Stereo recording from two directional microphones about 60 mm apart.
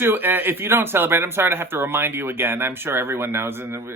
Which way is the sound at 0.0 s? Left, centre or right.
Right.